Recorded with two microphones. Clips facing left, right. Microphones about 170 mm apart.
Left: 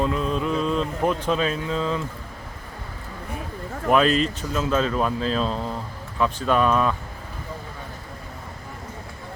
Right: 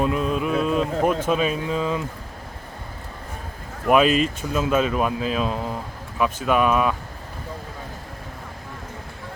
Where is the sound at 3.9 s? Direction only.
10° right (ahead or behind).